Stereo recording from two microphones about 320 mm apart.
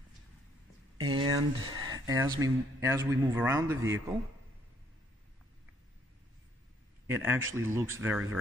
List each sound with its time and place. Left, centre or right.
0.9 s a sound: right
1.6 s speech: centre
7.1 s speech: centre